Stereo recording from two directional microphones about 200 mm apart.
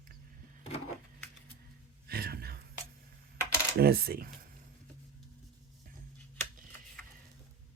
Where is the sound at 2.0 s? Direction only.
50° right (ahead or behind).